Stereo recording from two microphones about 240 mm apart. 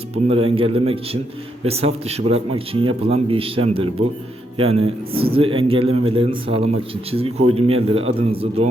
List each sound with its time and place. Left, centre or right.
0.1 s speech: right